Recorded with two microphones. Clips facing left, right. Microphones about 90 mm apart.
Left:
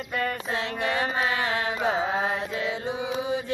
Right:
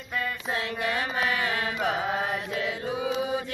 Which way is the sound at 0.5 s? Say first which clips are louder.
Left 1 dB; 25° left (ahead or behind).